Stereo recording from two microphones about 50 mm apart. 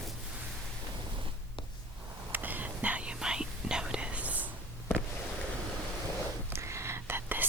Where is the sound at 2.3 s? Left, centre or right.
Right.